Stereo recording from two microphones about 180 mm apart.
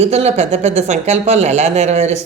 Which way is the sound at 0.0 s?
35° right (ahead or behind).